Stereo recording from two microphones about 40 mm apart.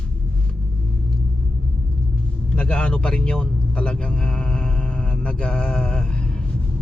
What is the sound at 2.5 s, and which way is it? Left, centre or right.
A man's voice, left.